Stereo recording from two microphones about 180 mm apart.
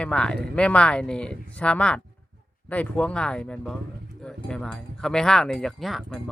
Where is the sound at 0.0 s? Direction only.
5° left (ahead or behind).